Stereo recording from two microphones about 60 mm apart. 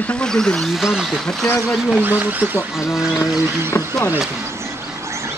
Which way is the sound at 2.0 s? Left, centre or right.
Right.